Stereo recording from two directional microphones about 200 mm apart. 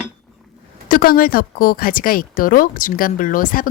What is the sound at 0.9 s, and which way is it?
Speech, 45° left (ahead or behind).